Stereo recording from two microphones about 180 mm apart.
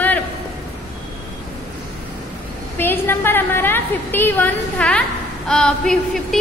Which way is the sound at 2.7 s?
10° left (ahead or behind).